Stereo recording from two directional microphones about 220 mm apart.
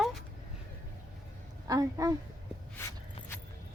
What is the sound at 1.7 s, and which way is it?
Speech, 15° right (ahead or behind).